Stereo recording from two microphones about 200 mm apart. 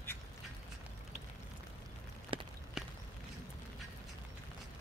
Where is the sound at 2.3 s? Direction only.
25° right (ahead or behind).